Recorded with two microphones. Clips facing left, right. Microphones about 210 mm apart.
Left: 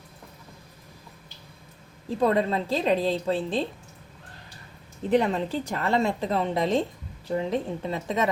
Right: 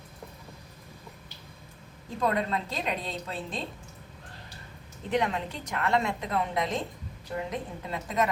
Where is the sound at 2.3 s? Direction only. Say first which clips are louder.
Left 6 dB; 30° left (ahead or behind).